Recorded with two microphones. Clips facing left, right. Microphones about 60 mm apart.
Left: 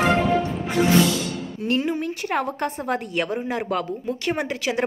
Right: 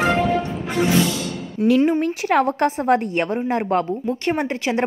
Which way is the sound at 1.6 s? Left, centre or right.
Right.